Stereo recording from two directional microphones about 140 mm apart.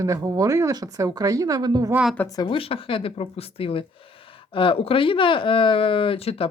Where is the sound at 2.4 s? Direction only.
40° left (ahead or behind).